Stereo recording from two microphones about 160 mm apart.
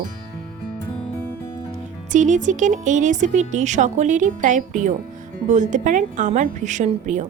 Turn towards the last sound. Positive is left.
turn(degrees=-50)  # may be behind; listen again after turning